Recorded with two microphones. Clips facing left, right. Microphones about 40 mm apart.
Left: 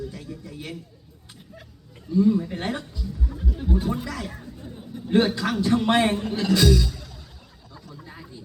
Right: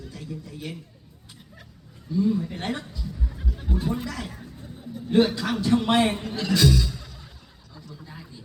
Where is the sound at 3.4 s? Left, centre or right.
Centre.